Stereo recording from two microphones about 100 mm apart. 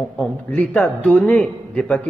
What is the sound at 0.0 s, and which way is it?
A man's voice, 10° left (ahead or behind).